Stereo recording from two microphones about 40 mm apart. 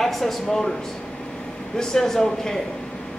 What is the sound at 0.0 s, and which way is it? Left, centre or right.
Speech, centre.